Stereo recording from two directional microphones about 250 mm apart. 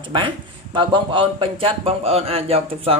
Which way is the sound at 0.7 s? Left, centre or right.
Centre.